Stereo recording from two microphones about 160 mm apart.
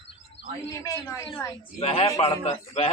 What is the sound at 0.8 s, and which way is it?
Speech, 20° left (ahead or behind).